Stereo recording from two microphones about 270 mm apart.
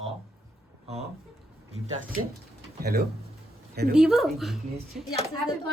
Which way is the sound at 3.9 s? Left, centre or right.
Centre.